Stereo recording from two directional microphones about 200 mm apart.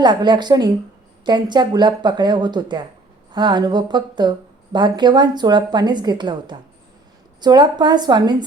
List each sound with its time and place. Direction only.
0.0 s a woman's voice: 20° right (ahead or behind)